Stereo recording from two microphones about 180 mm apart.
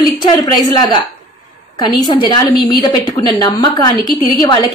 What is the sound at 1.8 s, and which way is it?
A woman's voice, 25° left (ahead or behind).